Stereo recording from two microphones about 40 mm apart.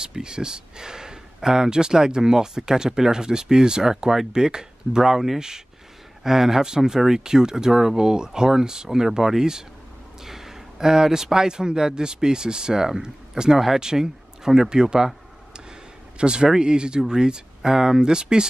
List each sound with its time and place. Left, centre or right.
0.0 s speech: centre